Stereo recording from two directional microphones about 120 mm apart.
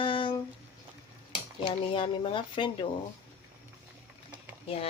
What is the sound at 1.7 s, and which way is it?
Speech, 45° left (ahead or behind).